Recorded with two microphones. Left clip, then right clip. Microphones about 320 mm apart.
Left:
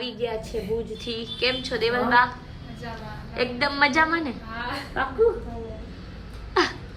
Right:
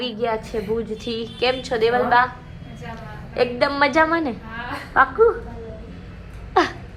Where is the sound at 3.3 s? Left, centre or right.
Centre.